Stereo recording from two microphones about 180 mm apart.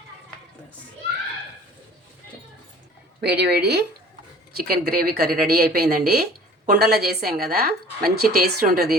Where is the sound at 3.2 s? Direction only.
65° right (ahead or behind).